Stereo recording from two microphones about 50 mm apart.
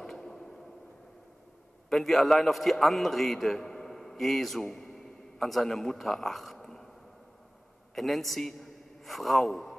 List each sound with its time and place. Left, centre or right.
0.0 s a sound: centre
1.9 s a man's voice: centre
7.9 s a man's voice: centre